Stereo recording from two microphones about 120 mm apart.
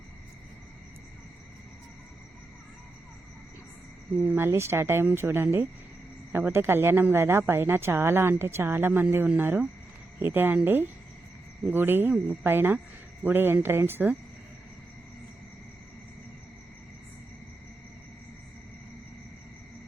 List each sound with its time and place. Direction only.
4.2 s a woman's voice: 15° right (ahead or behind)